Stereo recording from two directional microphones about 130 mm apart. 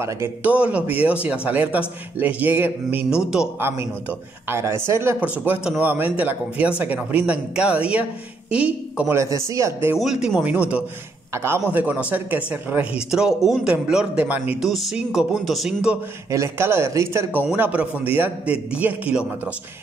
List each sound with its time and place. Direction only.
0.0 s speech: 15° right (ahead or behind)
4.5 s speech: 20° right (ahead or behind)
9.1 s speech: 25° right (ahead or behind)
9.9 s speech: 5° right (ahead or behind)
16.3 s speech: 20° right (ahead or behind)